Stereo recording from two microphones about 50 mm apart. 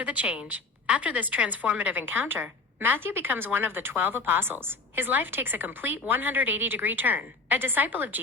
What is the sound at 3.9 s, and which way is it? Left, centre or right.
A woman's voice, right.